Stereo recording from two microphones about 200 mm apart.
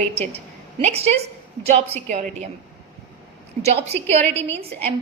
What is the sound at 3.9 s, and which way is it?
Speech, 10° left (ahead or behind).